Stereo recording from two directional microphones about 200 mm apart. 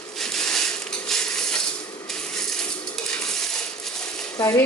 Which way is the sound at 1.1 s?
5° left (ahead or behind).